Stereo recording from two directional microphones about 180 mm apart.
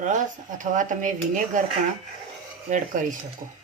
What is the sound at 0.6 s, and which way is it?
Speech, 45° right (ahead or behind).